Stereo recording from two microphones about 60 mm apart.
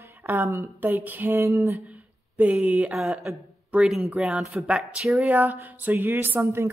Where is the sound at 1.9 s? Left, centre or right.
Right.